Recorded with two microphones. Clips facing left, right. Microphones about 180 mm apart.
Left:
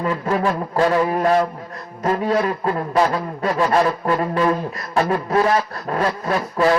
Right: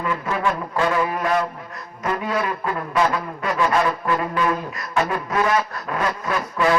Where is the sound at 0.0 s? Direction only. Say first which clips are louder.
Left 3 dB; 35° left (ahead or behind).